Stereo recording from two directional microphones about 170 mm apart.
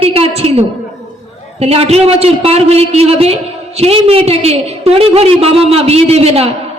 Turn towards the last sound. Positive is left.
turn(degrees=-35)  # may be behind; listen again after turning